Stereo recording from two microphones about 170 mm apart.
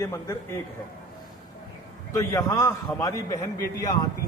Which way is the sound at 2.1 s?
20° left (ahead or behind).